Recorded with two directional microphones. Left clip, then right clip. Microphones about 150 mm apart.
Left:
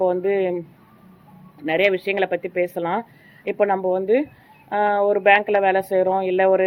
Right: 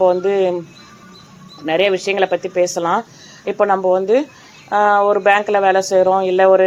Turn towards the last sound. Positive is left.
turn(degrees=10)  # may be behind; listen again after turning